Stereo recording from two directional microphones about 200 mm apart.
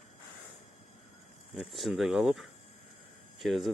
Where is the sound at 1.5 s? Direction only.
Centre (ahead or behind).